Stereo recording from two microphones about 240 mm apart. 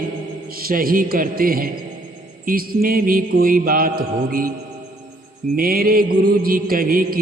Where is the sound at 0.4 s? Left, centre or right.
Right.